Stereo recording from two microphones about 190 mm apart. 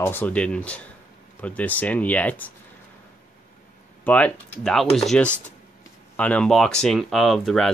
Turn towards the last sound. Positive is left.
turn(degrees=0)  # may be behind; listen again after turning